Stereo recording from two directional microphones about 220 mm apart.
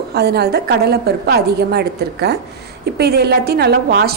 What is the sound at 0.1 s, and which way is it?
A woman's voice, 45° right (ahead or behind).